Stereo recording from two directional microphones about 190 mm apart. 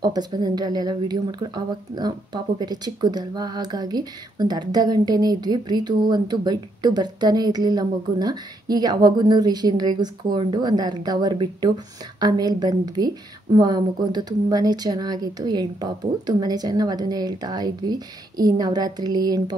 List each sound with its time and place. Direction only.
0.0 s speech: 20° right (ahead or behind)